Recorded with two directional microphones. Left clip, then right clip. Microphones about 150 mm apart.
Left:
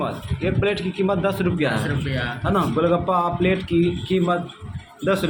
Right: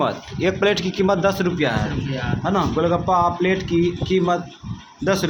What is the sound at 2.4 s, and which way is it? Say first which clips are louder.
A man's voice: right 1 dB; 10° right (ahead or behind).